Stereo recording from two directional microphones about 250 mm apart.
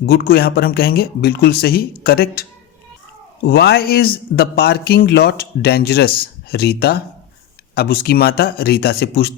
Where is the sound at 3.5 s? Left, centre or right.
Left.